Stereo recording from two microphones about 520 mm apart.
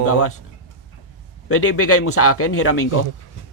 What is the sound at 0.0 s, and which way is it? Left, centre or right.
Speech, left.